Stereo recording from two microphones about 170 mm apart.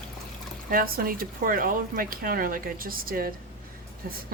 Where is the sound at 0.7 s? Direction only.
60° right (ahead or behind).